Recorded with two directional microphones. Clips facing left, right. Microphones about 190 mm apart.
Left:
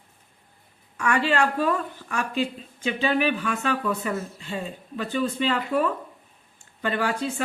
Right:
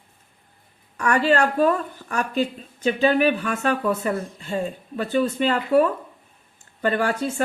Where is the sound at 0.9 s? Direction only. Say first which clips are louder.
Right 4 dB; 40° right (ahead or behind).